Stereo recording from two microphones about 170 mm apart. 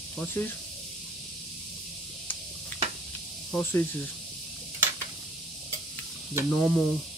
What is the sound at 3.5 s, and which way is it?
Speech, centre (ahead or behind).